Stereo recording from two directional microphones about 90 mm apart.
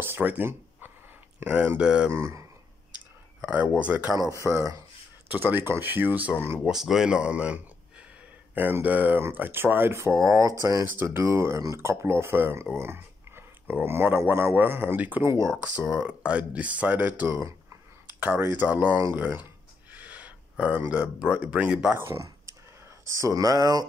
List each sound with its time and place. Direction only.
0.0 s a sound: 20° right (ahead or behind)
1.8 s speech: 10° right (ahead or behind)
2.0 s speech: 30° right (ahead or behind)
3.4 s speech: 15° right (ahead or behind)
4.5 s speech: 35° right (ahead or behind)
5.3 s speech: 20° right (ahead or behind)
6.6 s speech: 5° right (ahead or behind)
15.2 s speech: 35° right (ahead or behind)
15.9 s speech: 10° right (ahead or behind)
17.3 s speech: 30° right (ahead or behind)
19.9 s a sound: 15° right (ahead or behind)
20.9 s speech: 15° right (ahead or behind)
21.9 s speech: 30° right (ahead or behind); by 23.9 s 45° right (ahead or behind)